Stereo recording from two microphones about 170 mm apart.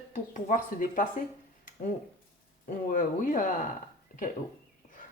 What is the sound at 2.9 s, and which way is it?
Speech, 55° left (ahead or behind).